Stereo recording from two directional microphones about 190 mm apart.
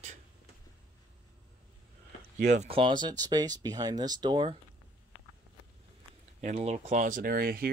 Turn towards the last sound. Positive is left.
turn(degrees=-55)  # may be behind; listen again after turning